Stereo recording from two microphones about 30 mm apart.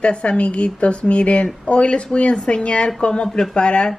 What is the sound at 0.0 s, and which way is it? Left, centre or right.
Speech, left.